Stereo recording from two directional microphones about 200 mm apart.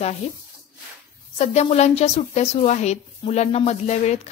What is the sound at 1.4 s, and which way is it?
Speech, 30° left (ahead or behind).